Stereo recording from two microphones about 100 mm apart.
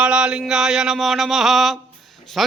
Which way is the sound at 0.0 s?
10° right (ahead or behind).